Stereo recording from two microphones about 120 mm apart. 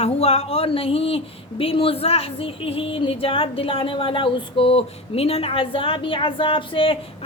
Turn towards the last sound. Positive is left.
turn(degrees=50)  # may be behind; listen again after turning